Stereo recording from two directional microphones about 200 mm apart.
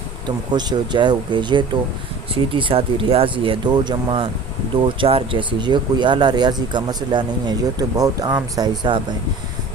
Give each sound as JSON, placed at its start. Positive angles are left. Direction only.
{"t": 0.3, "sound": "speech", "side_deg": -20}